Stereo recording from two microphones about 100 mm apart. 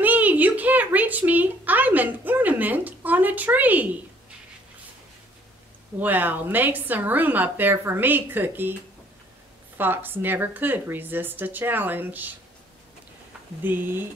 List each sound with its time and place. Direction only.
0.0 s a sound: 15° right (ahead or behind)
5.9 s a woman's voice: 20° right (ahead or behind)
9.8 s a woman's voice: 20° right (ahead or behind)
13.7 s a woman's voice: 20° right (ahead or behind)